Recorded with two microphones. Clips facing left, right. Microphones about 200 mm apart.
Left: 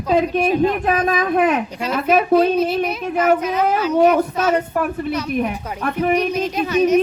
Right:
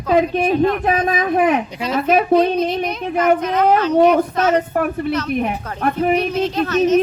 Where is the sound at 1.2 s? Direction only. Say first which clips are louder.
Right 1 dB; 50° right (ahead or behind).